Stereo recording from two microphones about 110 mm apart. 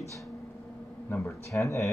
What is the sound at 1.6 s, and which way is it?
Speech, 25° left (ahead or behind).